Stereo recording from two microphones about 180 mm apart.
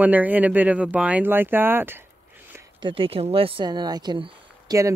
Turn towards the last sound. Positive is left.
turn(degrees=-20)  # may be behind; listen again after turning